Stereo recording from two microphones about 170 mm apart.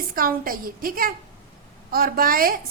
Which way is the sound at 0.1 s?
60° right (ahead or behind).